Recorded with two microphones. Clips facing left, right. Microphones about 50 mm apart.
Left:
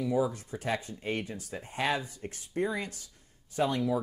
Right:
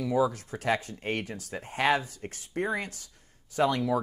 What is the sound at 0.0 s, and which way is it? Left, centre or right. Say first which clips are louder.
Speech: right 3 dB; right.